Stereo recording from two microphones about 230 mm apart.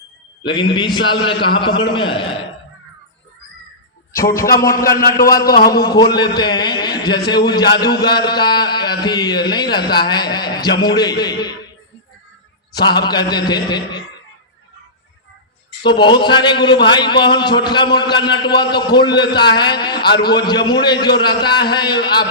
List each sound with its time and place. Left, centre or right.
0.4 s a man's voice: centre
5.3 s a man's voice: centre
9.4 s a sound: centre
9.7 s a man's voice: centre
12.7 s a man's voice: centre
15.9 s a man's voice: centre